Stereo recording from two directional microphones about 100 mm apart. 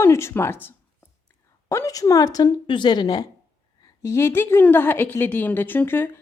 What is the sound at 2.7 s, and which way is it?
Speech, 50° left (ahead or behind).